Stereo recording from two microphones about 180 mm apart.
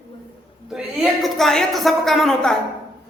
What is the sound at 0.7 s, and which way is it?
A man's voice, centre (ahead or behind).